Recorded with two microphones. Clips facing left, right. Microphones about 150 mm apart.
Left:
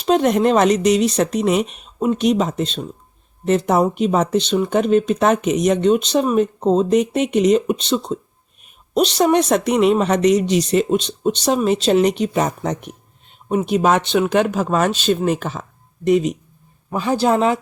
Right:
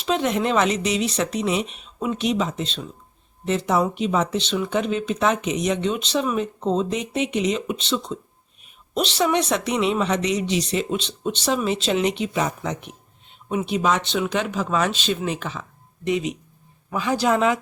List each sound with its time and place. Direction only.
0.0 s a woman's voice: 45° left (ahead or behind)